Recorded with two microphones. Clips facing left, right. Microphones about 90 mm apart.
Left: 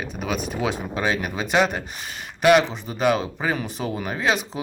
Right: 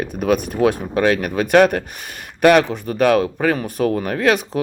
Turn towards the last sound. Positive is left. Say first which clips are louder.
# right 6 dB
turn(degrees=-60)  # may be behind; listen again after turning